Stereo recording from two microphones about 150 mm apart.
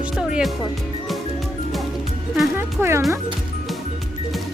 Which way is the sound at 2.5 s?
15° right (ahead or behind).